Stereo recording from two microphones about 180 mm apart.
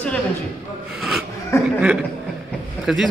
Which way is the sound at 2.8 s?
Centre (ahead or behind).